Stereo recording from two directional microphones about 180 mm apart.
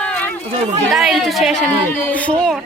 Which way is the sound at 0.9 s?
Centre (ahead or behind).